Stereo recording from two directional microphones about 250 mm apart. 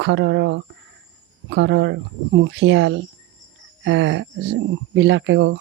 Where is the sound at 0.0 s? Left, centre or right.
Right.